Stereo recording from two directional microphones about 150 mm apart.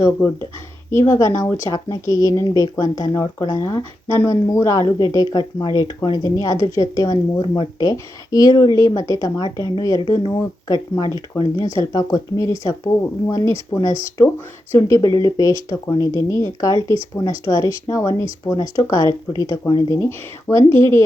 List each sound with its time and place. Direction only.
0.2 s speech: 10° left (ahead or behind)
0.9 s speech: 20° left (ahead or behind)